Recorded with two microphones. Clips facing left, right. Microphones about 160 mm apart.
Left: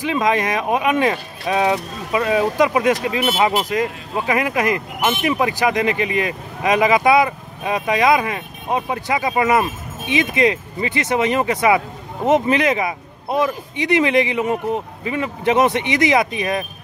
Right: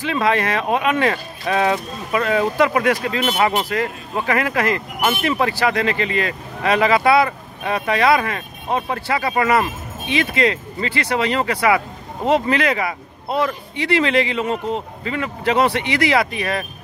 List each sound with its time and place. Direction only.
0.0 s speech: 15° left (ahead or behind)